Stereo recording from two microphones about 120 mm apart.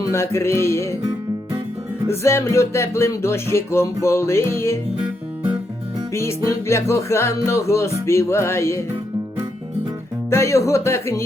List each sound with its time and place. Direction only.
0.0 s speech: 25° left (ahead or behind)
2.0 s speech: 25° left (ahead or behind)
6.1 s speech: 25° left (ahead or behind)
10.2 s speech: 25° left (ahead or behind)